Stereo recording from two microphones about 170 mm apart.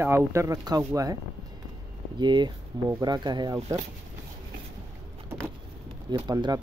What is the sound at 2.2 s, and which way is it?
Speech, 25° right (ahead or behind).